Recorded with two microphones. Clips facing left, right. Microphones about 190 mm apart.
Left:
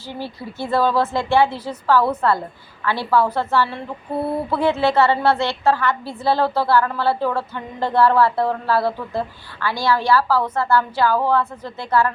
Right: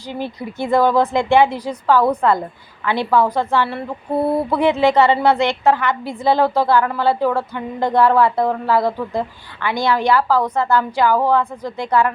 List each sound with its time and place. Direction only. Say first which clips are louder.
0.1 s a woman's voice: right 4 dB; 15° right (ahead or behind)